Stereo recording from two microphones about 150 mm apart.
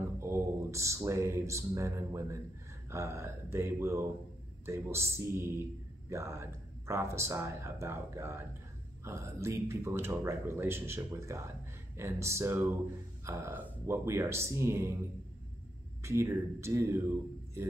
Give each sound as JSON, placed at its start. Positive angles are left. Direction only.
{"t": 0.2, "sound": "speech", "side_deg": -20}
{"t": 16.0, "sound": "speech", "side_deg": -20}